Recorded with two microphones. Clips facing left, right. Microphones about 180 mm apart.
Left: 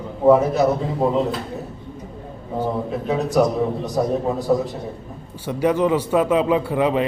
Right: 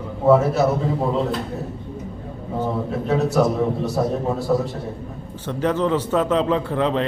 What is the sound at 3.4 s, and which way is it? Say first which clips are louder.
A man's voice: even; 15° left (ahead or behind).